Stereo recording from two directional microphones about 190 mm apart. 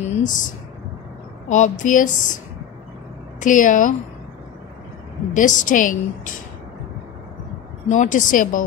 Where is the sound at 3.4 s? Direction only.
45° left (ahead or behind).